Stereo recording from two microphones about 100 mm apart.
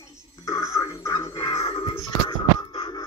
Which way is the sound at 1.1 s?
50° left (ahead or behind).